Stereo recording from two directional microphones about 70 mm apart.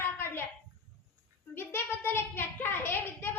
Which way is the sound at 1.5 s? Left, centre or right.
Left.